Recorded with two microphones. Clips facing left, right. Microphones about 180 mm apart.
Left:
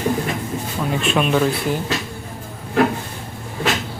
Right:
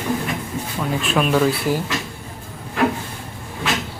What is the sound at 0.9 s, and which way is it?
Speech, centre (ahead or behind).